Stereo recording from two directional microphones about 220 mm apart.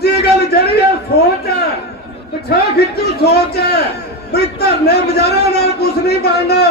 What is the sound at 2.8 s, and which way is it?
A man's voice, 45° left (ahead or behind).